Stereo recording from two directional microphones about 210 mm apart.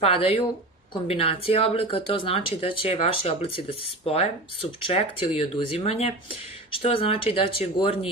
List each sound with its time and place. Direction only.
0.0 s speech: 25° left (ahead or behind)